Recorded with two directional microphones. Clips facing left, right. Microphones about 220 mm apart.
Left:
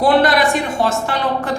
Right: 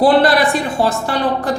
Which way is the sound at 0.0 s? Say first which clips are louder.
Right 2 dB; 30° right (ahead or behind).